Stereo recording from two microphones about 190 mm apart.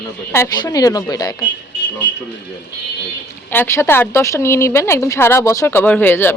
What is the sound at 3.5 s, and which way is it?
Speech, 10° left (ahead or behind).